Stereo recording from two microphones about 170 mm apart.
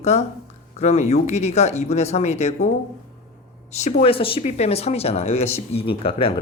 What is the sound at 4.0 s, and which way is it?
Speech, 35° left (ahead or behind).